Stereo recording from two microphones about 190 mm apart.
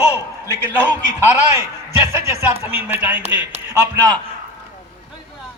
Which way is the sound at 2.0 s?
15° right (ahead or behind).